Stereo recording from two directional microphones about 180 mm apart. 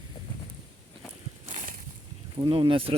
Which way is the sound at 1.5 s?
40° right (ahead or behind).